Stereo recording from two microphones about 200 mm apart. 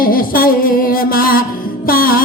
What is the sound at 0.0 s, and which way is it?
Music, 45° left (ahead or behind).